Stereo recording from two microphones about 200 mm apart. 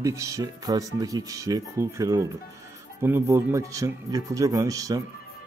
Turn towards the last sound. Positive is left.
turn(degrees=-15)  # may be behind; listen again after turning